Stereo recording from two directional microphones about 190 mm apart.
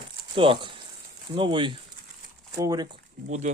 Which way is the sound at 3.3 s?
35° right (ahead or behind).